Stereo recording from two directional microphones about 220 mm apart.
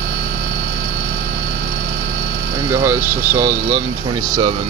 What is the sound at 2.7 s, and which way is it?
Speech, 10° right (ahead or behind).